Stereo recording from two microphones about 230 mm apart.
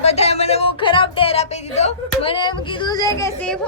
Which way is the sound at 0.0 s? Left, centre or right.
Left.